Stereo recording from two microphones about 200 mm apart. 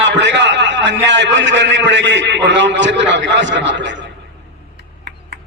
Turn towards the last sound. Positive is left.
turn(degrees=-65)  # may be behind; listen again after turning